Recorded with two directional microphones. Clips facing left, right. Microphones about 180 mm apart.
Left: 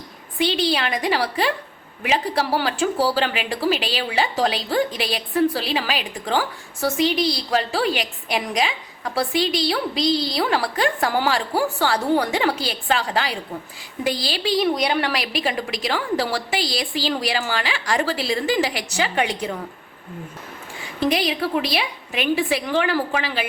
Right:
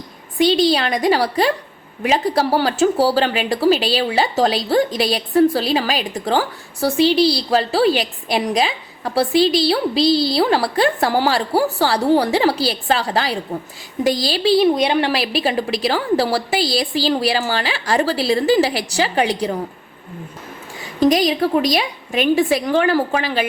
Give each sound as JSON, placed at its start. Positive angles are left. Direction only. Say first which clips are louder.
{"t": 0.3, "sound": "a woman's voice", "louder": "right 6 dB", "side_deg": -40}
{"t": 21.0, "sound": "a woman's voice", "louder": "right 6 dB", "side_deg": -40}